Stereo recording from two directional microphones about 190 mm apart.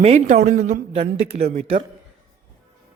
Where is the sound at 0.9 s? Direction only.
30° right (ahead or behind).